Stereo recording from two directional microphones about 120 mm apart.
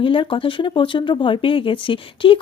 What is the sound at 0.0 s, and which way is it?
Speech, 45° left (ahead or behind).